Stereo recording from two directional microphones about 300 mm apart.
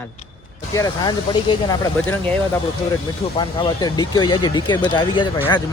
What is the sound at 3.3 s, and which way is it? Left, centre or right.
Speech, centre.